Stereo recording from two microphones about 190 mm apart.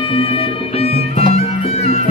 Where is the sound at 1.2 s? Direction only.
35° left (ahead or behind).